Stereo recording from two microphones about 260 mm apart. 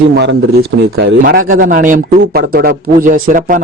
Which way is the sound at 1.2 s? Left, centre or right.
Right.